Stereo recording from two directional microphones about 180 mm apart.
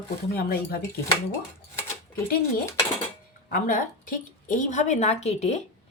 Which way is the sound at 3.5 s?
50° left (ahead or behind).